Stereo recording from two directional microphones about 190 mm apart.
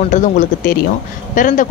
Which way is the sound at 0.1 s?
40° left (ahead or behind).